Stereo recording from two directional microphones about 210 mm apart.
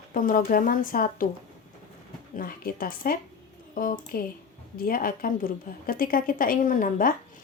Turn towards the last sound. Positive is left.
turn(degrees=40)  # may be behind; listen again after turning